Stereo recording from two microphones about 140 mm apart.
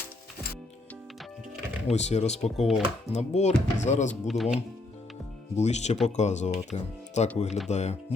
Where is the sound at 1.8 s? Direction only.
55° left (ahead or behind).